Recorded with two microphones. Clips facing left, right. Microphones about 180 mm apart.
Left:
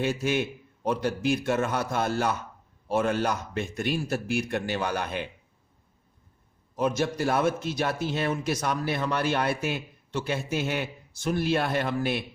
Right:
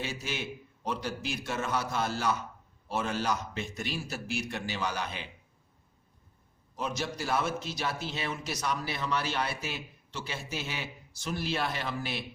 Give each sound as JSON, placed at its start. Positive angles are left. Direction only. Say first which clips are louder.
{"t": 0.0, "sound": "a man's voice", "louder": "left 10 dB", "side_deg": 55}
{"t": 6.7, "sound": "a man's voice", "louder": "left 8 dB", "side_deg": 55}